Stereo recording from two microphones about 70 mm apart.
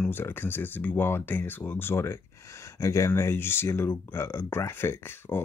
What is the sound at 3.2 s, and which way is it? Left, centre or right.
Speech, left.